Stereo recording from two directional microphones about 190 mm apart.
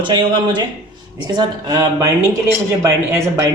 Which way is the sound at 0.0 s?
25° right (ahead or behind).